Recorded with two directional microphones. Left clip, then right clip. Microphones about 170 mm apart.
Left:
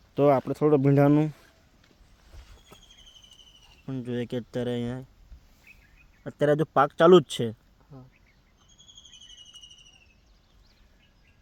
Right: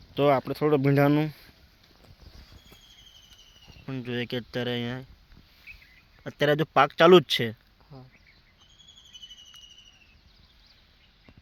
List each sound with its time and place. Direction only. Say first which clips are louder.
0.2 s speech: left 1 dB; 15° left (ahead or behind)
3.8 s speech: even; 5° left (ahead or behind)
6.2 s speech: left 1 dB; 5° right (ahead or behind)